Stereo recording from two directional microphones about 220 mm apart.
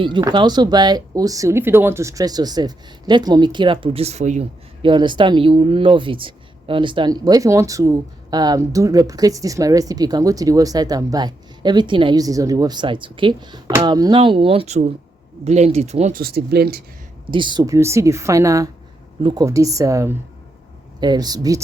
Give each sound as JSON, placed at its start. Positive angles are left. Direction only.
{"t": 0.0, "sound": "speech", "side_deg": -20}
{"t": 16.2, "sound": "speech", "side_deg": -45}
{"t": 17.3, "sound": "a woman's voice", "side_deg": -20}